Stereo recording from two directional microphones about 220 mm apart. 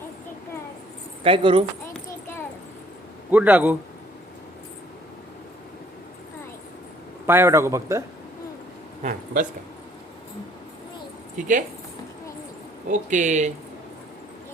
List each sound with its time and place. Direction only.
1.2 s speech: 25° right (ahead or behind)
2.0 s a sound: 10° left (ahead or behind)
3.3 s a man's voice: 5° right (ahead or behind)
7.3 s a man's voice: 10° right (ahead or behind)
9.0 s speech: 35° right (ahead or behind)
11.3 s speech: 35° right (ahead or behind)
12.9 s speech: 35° right (ahead or behind)